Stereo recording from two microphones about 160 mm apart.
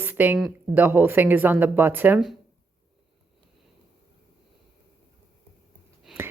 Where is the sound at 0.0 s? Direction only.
10° right (ahead or behind).